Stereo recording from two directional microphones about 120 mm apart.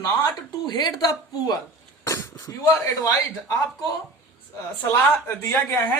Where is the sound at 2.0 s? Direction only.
25° left (ahead or behind).